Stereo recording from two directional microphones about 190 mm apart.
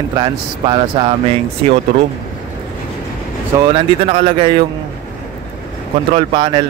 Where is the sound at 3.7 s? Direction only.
30° right (ahead or behind).